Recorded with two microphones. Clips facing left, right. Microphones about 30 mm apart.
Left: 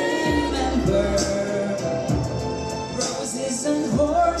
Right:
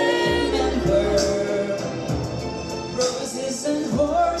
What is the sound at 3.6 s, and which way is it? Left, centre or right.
Music, centre.